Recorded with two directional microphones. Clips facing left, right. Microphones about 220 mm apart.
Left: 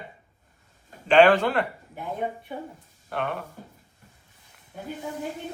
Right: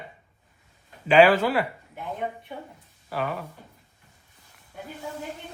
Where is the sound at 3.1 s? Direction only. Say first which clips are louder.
Even; centre (ahead or behind).